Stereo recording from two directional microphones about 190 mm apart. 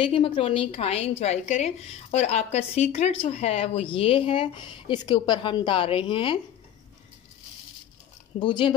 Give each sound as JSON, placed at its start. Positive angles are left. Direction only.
{"t": 0.0, "sound": "a woman's voice", "side_deg": 25}
{"t": 8.4, "sound": "a woman's voice", "side_deg": 25}